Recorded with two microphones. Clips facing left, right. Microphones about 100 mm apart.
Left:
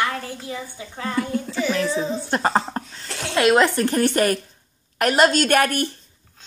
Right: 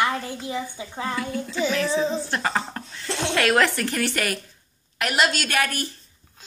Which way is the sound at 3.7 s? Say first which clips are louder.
Left 7 dB; 40° left (ahead or behind).